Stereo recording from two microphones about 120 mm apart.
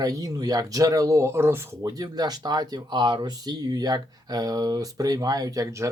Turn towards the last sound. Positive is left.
turn(degrees=-30)  # may be behind; listen again after turning